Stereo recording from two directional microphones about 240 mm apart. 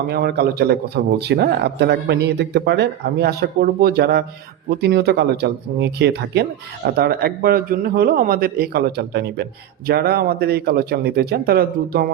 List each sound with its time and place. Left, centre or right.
0.1 s a man's voice: right